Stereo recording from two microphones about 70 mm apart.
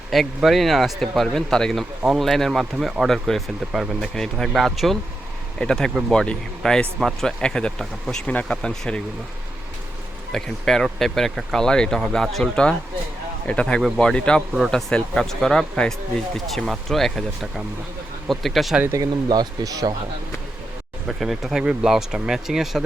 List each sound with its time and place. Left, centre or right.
0.1 s speech: centre
10.3 s speech: centre
13.5 s speech: centre
18.9 s speech: right
21.1 s speech: centre